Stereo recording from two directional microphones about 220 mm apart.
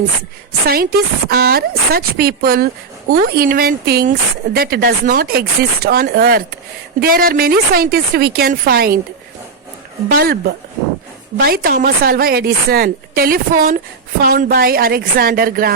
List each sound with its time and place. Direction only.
0.7 s speech: 45° right (ahead or behind)
10.1 s speech: 45° right (ahead or behind)
11.3 s a woman's voice: 40° right (ahead or behind)